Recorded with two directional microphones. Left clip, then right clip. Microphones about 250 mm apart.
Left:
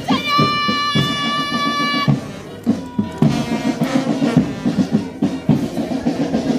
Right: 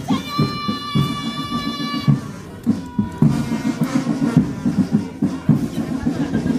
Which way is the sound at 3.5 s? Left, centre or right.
Centre.